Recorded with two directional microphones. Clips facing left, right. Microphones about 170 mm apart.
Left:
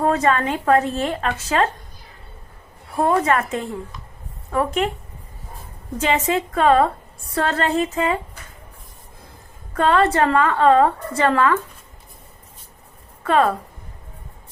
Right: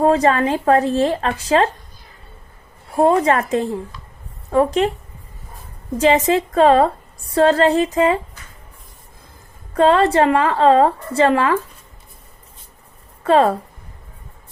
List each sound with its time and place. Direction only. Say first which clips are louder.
0.0 s speech: right 4 dB; 30° right (ahead or behind)
2.9 s speech: right 4 dB; 30° right (ahead or behind)
6.0 s a woman's voice: right 5 dB; 35° right (ahead or behind)
9.7 s a woman's voice: right 4 dB; 30° right (ahead or behind)
13.2 s a woman's voice: right 4 dB; 30° right (ahead or behind)